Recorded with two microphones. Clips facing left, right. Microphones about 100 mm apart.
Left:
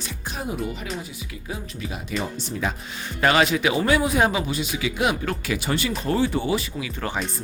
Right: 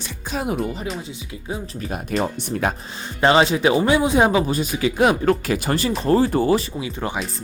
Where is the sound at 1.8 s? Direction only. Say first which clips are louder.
Right 6 dB; 45° right (ahead or behind).